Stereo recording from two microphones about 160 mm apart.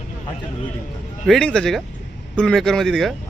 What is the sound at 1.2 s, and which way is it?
Speech, 5° left (ahead or behind).